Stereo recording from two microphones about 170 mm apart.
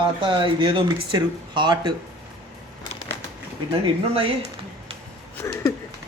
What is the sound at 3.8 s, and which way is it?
Speech, 35° right (ahead or behind).